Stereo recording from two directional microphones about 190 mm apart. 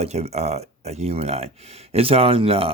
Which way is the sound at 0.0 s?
35° right (ahead or behind).